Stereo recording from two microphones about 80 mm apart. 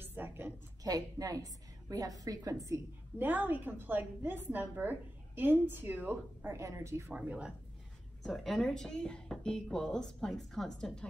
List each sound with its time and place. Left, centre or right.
0.0 s a sound: right
0.8 s a woman's voice: right
3.2 s a woman's voice: right
6.5 s a woman's voice: right
7.1 s speech: centre
8.2 s speech: centre